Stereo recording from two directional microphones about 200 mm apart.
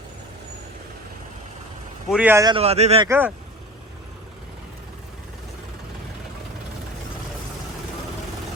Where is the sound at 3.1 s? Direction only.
10° right (ahead or behind).